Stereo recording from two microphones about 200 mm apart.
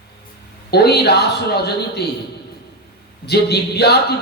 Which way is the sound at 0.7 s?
55° left (ahead or behind).